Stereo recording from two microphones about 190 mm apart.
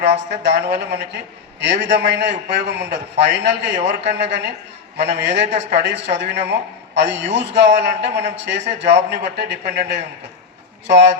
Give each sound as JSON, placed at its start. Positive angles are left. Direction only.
{"t": 0.0, "sound": "a man's voice", "side_deg": -65}